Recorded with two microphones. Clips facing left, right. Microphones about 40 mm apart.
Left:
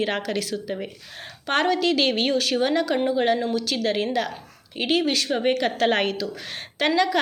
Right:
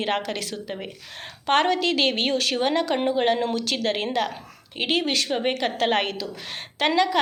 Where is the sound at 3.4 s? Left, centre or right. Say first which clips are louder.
Even; right.